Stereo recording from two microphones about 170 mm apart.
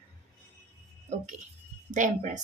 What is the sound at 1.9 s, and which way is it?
Speech, 45° right (ahead or behind).